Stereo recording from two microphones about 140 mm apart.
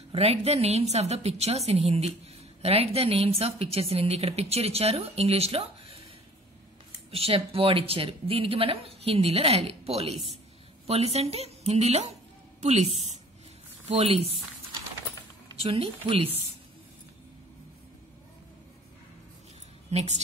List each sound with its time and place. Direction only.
0.1 s a woman's voice: 45° right (ahead or behind)
7.1 s a woman's voice: 45° right (ahead or behind)
15.5 s a woman's voice: 45° right (ahead or behind)
19.9 s a woman's voice: 50° right (ahead or behind)